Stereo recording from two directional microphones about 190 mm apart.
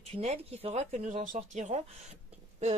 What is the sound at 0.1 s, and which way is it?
Speech, 30° right (ahead or behind).